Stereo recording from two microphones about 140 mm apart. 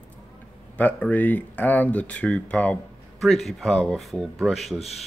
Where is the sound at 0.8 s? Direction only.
10° left (ahead or behind).